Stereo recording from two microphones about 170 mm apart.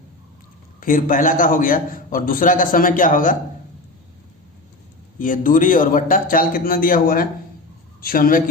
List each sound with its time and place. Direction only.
0.8 s a man's voice: 55° left (ahead or behind)
5.2 s a man's voice: 50° left (ahead or behind)